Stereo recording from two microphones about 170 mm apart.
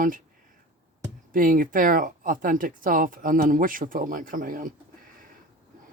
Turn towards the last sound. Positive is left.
turn(degrees=-55)  # may be behind; listen again after turning